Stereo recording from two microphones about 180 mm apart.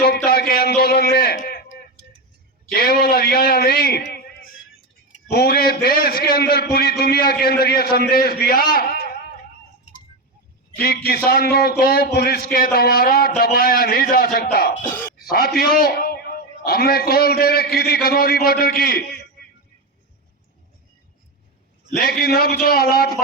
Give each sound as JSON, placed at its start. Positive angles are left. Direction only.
{"t": 0.3, "sound": "a sound", "side_deg": 60}
{"t": 5.3, "sound": "a man's voice", "side_deg": 60}
{"t": 10.8, "sound": "a man's voice", "side_deg": 60}
{"t": 21.9, "sound": "a man's voice", "side_deg": 60}